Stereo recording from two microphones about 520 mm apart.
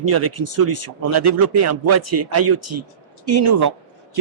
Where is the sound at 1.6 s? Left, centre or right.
Right.